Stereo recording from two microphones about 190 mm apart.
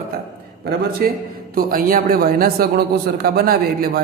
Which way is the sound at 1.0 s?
50° right (ahead or behind).